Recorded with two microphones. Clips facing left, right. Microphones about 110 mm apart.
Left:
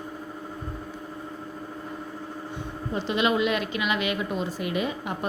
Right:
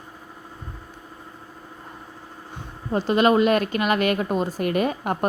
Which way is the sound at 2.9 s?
45° right (ahead or behind).